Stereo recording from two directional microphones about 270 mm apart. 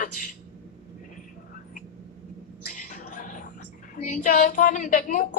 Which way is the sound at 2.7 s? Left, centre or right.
Left.